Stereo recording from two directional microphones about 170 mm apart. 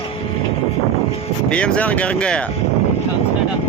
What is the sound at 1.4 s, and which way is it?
Speech, 5° left (ahead or behind).